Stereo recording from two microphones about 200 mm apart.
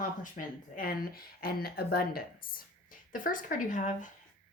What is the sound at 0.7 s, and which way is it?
Speech, 50° left (ahead or behind).